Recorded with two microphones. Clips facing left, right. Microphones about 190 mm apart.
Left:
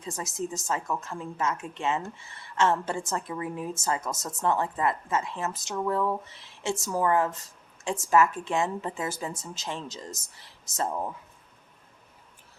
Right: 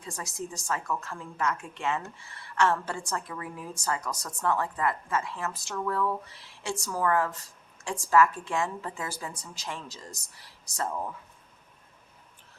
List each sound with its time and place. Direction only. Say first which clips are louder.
0.0 s a woman's voice: left 4 dB; 20° left (ahead or behind)